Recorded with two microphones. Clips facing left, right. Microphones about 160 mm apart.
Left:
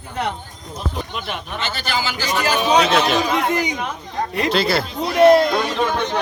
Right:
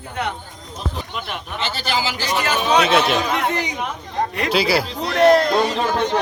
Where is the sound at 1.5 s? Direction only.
30° right (ahead or behind).